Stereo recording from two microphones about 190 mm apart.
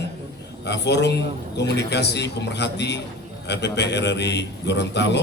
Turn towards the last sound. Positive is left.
turn(degrees=65)  # may be behind; listen again after turning